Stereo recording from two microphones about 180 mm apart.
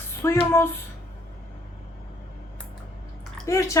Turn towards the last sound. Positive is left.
turn(degrees=15)  # may be behind; listen again after turning